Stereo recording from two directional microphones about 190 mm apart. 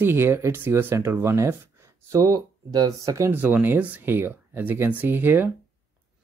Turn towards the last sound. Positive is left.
turn(degrees=-10)  # may be behind; listen again after turning